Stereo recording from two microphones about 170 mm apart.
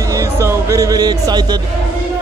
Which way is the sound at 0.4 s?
15° right (ahead or behind).